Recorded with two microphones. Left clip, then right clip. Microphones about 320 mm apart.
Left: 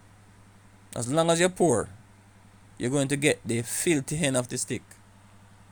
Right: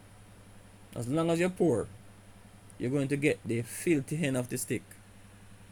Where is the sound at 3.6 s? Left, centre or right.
Left.